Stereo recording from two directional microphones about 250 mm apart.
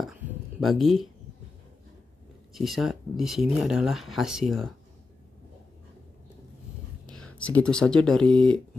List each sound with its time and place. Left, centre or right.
0.0 s a sound: centre
2.5 s speech: centre
7.1 s speech: centre